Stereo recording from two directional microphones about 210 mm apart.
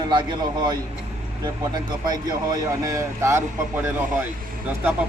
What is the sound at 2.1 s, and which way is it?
Speech, 20° right (ahead or behind).